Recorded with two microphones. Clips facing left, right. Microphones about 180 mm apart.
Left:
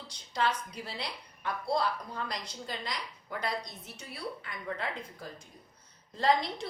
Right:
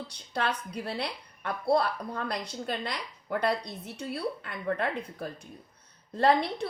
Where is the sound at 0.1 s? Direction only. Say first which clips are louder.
Left 1 dB; 60° right (ahead or behind).